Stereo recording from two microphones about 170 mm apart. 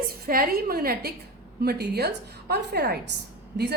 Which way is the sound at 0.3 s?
60° right (ahead or behind).